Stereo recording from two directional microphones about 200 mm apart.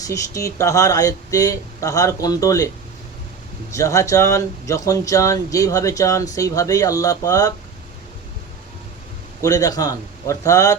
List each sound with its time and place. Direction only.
0.0 s speech: 15° left (ahead or behind)
3.7 s speech: 15° left (ahead or behind)
9.4 s speech: 15° left (ahead or behind)